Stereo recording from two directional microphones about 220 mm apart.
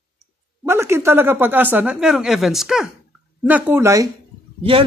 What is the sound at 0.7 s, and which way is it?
A woman's voice, 10° right (ahead or behind).